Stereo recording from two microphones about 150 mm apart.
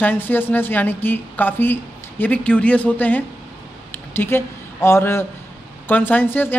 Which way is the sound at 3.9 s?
15° left (ahead or behind).